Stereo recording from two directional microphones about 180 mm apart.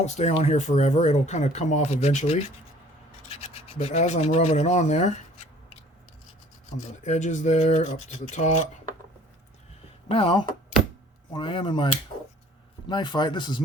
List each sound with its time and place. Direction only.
0.0 s speech: 40° left (ahead or behind)
3.2 s rub: 35° left (ahead or behind)
7.0 s speech: 45° left (ahead or behind)
10.1 s speech: 30° left (ahead or behind)
12.9 s speech: 25° left (ahead or behind)